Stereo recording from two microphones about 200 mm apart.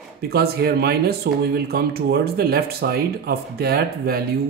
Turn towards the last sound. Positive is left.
turn(degrees=-50)  # may be behind; listen again after turning